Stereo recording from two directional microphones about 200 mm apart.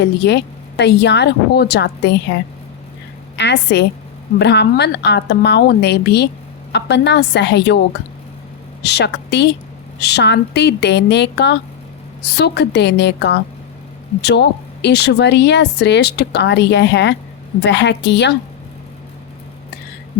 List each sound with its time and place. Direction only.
0.0 s a woman's voice: 60° left (ahead or behind)
3.3 s a woman's voice: 60° left (ahead or behind)
8.8 s a woman's voice: 55° left (ahead or behind)